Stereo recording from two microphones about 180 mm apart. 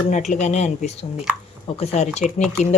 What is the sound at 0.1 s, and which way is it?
Speech, 40° left (ahead or behind).